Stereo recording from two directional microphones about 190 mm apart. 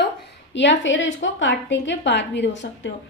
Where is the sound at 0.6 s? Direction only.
75° left (ahead or behind).